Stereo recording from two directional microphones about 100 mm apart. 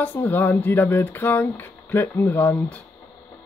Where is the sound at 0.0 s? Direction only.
20° left (ahead or behind).